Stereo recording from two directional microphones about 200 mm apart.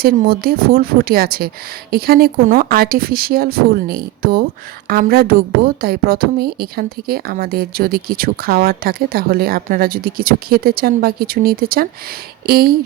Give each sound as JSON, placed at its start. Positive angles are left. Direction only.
{"t": 0.0, "sound": "a woman's voice", "side_deg": -50}